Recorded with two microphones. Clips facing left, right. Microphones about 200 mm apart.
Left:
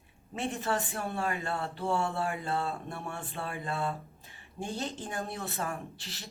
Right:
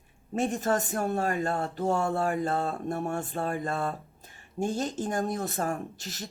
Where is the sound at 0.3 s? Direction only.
45° right (ahead or behind).